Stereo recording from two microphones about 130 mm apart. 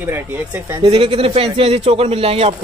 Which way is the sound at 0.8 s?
45° right (ahead or behind).